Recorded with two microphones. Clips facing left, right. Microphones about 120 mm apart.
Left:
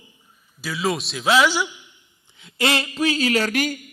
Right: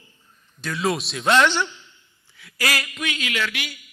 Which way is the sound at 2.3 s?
25° left (ahead or behind).